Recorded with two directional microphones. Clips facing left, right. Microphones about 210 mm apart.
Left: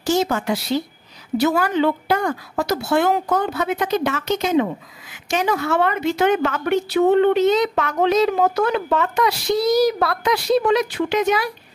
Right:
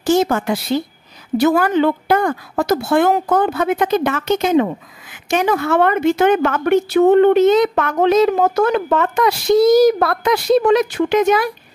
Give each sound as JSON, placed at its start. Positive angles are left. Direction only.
{"t": 0.0, "sound": "a woman's voice", "side_deg": -55}